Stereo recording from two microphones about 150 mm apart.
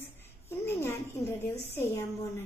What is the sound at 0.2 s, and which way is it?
A woman's voice, 15° left (ahead or behind).